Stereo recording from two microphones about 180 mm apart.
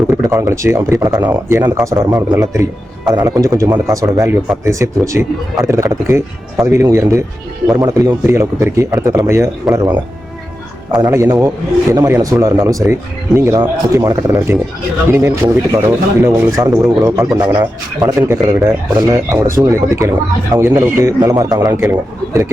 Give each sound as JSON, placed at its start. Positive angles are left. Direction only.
{"t": 0.1, "sound": "a man's voice", "side_deg": -15}